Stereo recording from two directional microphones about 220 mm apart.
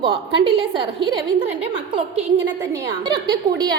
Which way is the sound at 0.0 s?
25° right (ahead or behind).